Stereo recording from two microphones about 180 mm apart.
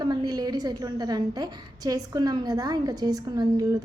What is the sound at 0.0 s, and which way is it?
A woman's voice, 20° right (ahead or behind).